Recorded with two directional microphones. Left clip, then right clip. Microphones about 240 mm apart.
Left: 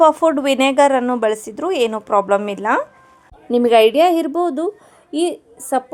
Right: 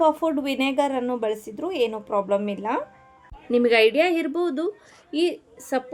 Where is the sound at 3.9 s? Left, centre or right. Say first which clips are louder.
Left 7 dB; centre.